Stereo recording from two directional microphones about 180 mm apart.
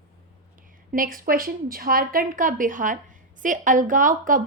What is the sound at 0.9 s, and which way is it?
A woman's voice, 50° right (ahead or behind).